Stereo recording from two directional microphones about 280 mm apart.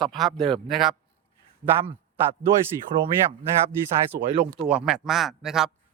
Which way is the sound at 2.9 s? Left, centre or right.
Centre.